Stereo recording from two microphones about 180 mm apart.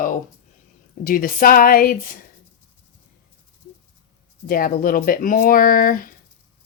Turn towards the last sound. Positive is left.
turn(degrees=50)  # may be behind; listen again after turning